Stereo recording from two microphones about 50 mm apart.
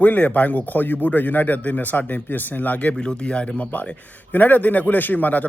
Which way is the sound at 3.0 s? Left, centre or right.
Centre.